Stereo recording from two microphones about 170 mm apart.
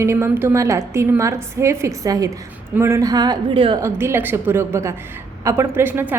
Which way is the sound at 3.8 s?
15° right (ahead or behind).